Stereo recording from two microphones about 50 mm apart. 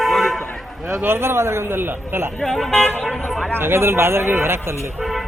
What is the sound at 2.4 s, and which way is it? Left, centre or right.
Speech, centre.